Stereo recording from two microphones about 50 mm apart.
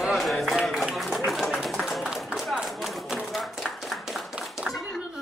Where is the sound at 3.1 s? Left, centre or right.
Centre.